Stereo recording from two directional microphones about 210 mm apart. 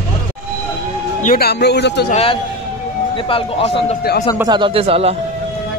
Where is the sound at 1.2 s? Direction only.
50° left (ahead or behind).